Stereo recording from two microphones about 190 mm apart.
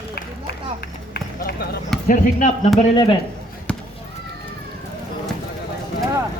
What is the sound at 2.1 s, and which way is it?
Speech, 40° left (ahead or behind).